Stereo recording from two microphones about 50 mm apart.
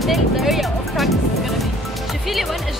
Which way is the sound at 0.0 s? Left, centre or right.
Centre.